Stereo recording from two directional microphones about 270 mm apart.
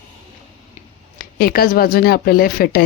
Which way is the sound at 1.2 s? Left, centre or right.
Left.